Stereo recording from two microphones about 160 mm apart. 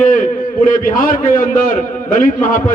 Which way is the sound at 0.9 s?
60° left (ahead or behind).